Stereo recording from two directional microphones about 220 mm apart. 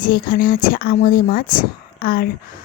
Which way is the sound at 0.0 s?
40° left (ahead or behind).